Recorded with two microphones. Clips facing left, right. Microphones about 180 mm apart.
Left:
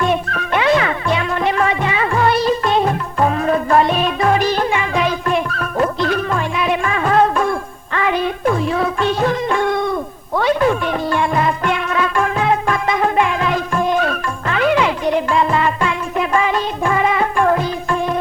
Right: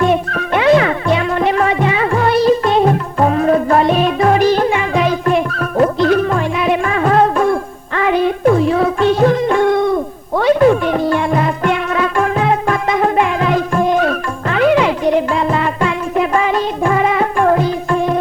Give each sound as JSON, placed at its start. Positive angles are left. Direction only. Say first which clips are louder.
{"t": 0.0, "sound": "music", "louder": "right 4 dB", "side_deg": -45}